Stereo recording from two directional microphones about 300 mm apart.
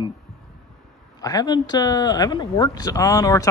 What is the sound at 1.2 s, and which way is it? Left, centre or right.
A man's voice, centre.